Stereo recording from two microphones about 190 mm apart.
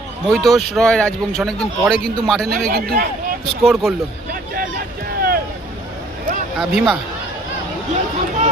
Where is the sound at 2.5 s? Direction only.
50° right (ahead or behind).